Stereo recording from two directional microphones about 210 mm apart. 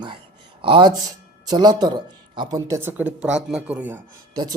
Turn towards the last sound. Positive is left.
turn(degrees=-20)  # may be behind; listen again after turning